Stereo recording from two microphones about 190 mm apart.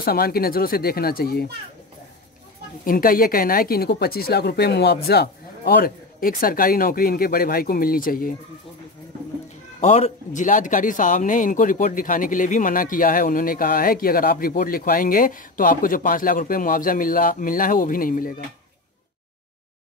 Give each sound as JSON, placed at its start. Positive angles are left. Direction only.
{"t": 0.0, "sound": "speech", "side_deg": 55}
{"t": 2.8, "sound": "speech", "side_deg": 50}
{"t": 9.8, "sound": "speech", "side_deg": 35}